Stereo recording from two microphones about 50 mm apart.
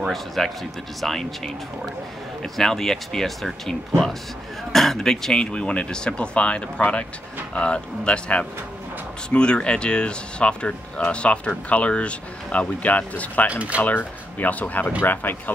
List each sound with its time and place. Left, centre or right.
0.4 s speech: centre; by 13.5 s left
13.5 s speech: right
13.8 s speech: left